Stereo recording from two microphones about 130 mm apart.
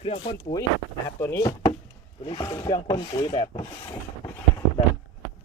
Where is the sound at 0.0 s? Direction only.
40° left (ahead or behind).